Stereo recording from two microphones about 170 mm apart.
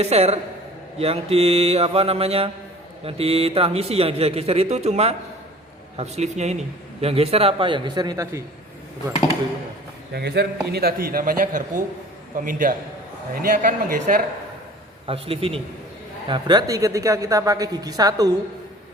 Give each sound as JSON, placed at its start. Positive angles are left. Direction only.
{"t": 0.0, "sound": "a man's voice", "side_deg": -40}
{"t": 10.1, "sound": "a man's voice", "side_deg": -75}
{"t": 15.0, "sound": "a man's voice", "side_deg": -35}